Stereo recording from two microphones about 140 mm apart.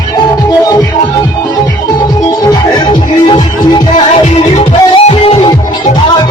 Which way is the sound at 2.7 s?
35° left (ahead or behind).